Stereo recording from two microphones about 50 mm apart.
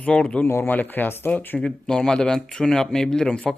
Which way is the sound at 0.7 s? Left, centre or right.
Left.